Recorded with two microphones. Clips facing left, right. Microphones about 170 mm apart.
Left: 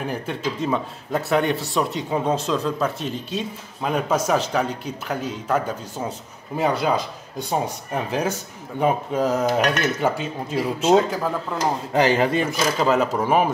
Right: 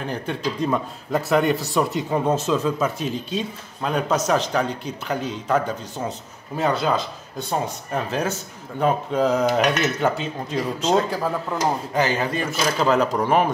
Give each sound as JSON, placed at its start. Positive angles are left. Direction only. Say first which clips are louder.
{"t": 0.0, "sound": "speech", "louder": "even", "side_deg": 5}
{"t": 11.9, "sound": "speech", "louder": "left 4 dB", "side_deg": 25}
{"t": 12.7, "sound": "speech", "louder": "right 1 dB", "side_deg": 5}